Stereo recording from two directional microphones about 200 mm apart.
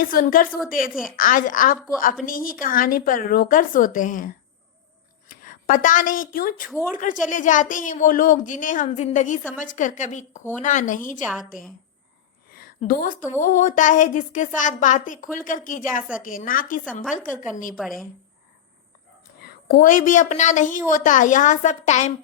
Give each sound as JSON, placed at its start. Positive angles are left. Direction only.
{"t": 0.0, "sound": "a woman's voice", "side_deg": 45}
{"t": 12.5, "sound": "a sound", "side_deg": 50}
{"t": 12.9, "sound": "a woman's voice", "side_deg": 45}
{"t": 17.7, "sound": "a woman's voice", "side_deg": 0}
{"t": 19.4, "sound": "a woman's voice", "side_deg": 50}